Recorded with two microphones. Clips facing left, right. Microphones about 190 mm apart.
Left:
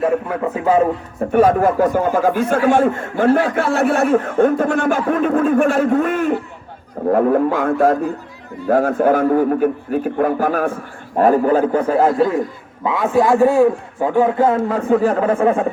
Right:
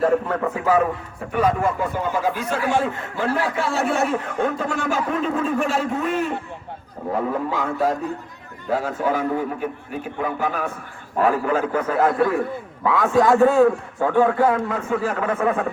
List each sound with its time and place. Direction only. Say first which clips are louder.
0.4 s a man's voice: left 7 dB; 20° left (ahead or behind)
1.3 s speech: left 7 dB; 55° left (ahead or behind)
11.2 s a man's voice: left 6 dB; 40° left (ahead or behind); by 14.6 s 20° left (ahead or behind)
14.7 s a man's voice: left 8 dB; 35° left (ahead or behind)